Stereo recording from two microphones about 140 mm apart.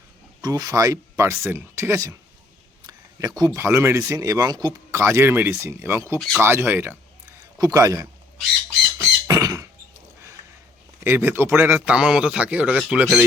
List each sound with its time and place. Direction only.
0.4 s a man's voice: 25° right (ahead or behind)
9.0 s squawk: 25° right (ahead or behind)
11.0 s a man's voice: 15° right (ahead or behind)